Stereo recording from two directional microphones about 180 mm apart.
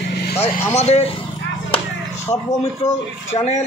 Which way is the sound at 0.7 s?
35° left (ahead or behind).